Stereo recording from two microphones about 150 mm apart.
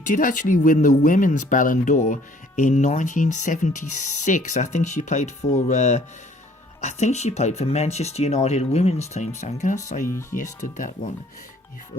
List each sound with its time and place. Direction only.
0.0 s speech: 65° left (ahead or behind)